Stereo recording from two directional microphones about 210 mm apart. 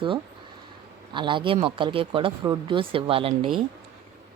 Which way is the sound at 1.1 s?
20° right (ahead or behind).